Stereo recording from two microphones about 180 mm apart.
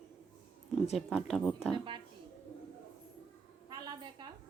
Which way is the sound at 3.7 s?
25° right (ahead or behind).